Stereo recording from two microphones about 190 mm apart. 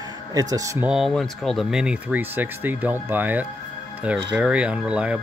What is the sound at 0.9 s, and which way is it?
Speech, centre (ahead or behind).